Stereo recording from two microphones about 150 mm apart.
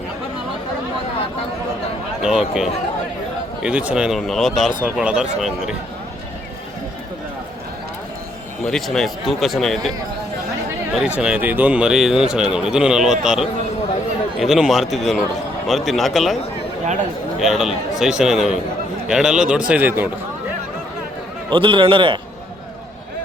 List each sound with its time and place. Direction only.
2.2 s speech: 5° right (ahead or behind)
8.6 s speech: 5° left (ahead or behind)
10.9 s speech: 5° right (ahead or behind)
16.8 s speech: 55° right (ahead or behind)
17.4 s a man's voice: centre (ahead or behind)
21.5 s a man's voice: 35° right (ahead or behind)